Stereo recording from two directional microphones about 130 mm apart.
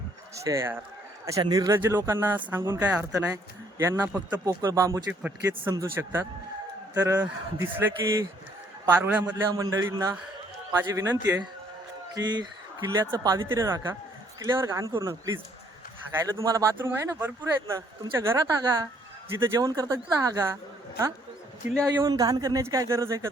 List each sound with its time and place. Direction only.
0.3 s a woman's voice: 25° right (ahead or behind)
1.4 s a woman's voice: 30° right (ahead or behind)
8.9 s a man's voice: 10° right (ahead or behind)
9.5 s a woman's voice: 25° right (ahead or behind)
12.1 s a woman's voice: 35° right (ahead or behind)
21.8 s a woman's voice: 30° right (ahead or behind)